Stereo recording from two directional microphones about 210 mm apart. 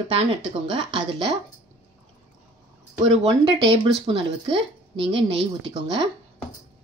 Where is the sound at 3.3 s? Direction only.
25° right (ahead or behind).